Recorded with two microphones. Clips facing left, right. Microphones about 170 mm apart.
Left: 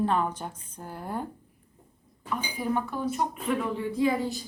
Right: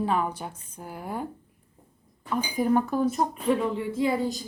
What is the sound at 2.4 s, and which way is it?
Speech, 45° right (ahead or behind).